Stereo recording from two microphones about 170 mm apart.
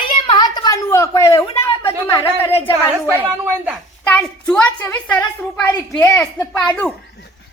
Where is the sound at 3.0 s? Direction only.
15° right (ahead or behind).